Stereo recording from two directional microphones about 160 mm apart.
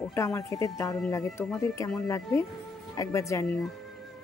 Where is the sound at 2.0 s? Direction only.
20° left (ahead or behind).